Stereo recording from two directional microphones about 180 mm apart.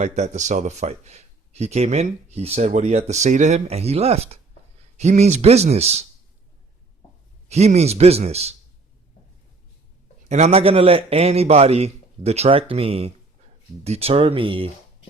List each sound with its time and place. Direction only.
0.0 s speech: 40° right (ahead or behind)
7.4 s speech: 35° right (ahead or behind)
10.2 s speech: 40° right (ahead or behind)